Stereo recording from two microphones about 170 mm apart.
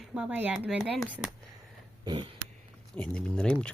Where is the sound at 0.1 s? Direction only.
5° right (ahead or behind).